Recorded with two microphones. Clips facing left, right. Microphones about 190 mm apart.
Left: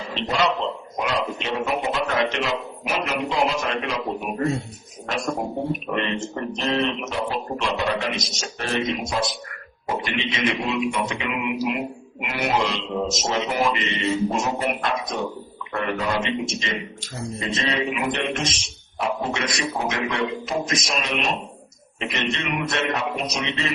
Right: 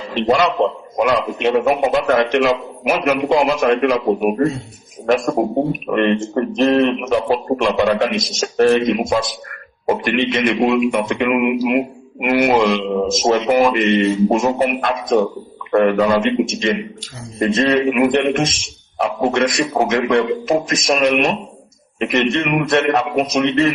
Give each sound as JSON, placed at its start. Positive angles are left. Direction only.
{"t": 0.1, "sound": "speech", "side_deg": -60}